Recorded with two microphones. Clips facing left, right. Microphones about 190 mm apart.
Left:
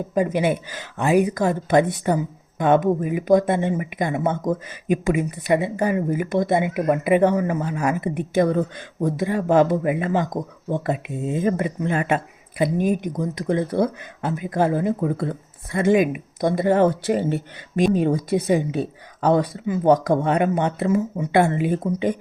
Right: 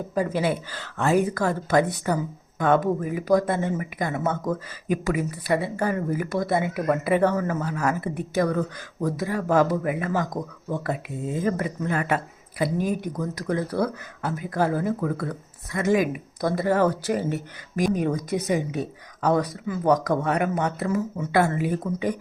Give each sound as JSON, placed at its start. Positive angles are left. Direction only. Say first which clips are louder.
{"t": 0.1, "sound": "speech", "louder": "left 4 dB", "side_deg": 20}